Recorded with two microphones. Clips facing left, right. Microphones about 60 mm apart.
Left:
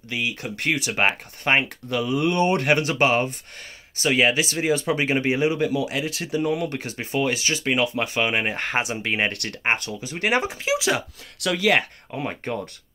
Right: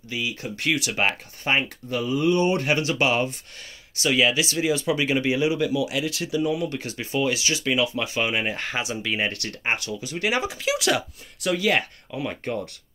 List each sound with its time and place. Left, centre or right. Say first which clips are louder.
0.1 s speech: left 2 dB; left
0.7 s speech: left 1 dB; left
1.4 s speech: left 3 dB; left
6.8 s speech: left 1 dB; left
10.6 s speech: even; left
11.3 s speech: even; left
11.6 s speech: left 6 dB; left